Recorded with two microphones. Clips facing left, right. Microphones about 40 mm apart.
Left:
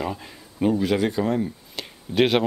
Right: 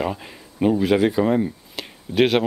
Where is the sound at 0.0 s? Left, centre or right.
Centre.